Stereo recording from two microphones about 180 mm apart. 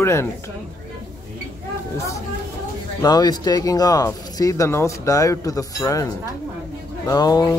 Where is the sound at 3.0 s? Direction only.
20° left (ahead or behind).